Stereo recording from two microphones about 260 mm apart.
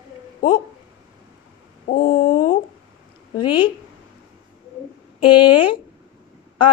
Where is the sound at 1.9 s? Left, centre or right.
Centre.